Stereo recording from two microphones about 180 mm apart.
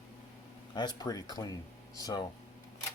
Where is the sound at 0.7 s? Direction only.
25° left (ahead or behind).